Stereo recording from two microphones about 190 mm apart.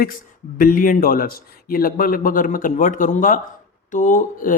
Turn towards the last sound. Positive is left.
turn(degrees=45)  # may be behind; listen again after turning